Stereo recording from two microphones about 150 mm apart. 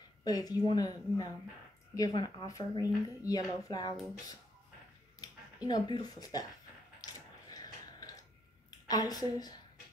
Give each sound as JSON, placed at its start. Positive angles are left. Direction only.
{"t": 0.2, "sound": "speech", "side_deg": 25}
{"t": 5.7, "sound": "speech", "side_deg": 30}
{"t": 7.0, "sound": "a sound", "side_deg": 25}
{"t": 8.6, "sound": "a woman's voice", "side_deg": 25}